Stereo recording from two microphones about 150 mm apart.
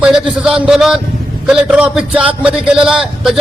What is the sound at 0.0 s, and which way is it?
A man's voice, 5° right (ahead or behind).